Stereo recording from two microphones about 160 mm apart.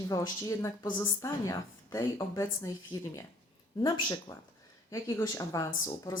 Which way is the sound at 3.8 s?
20° left (ahead or behind).